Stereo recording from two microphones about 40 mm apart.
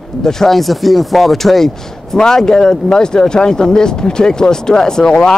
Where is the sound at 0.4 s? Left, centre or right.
Centre.